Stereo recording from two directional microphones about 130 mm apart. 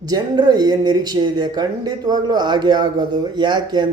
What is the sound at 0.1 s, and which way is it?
Speech, 30° right (ahead or behind).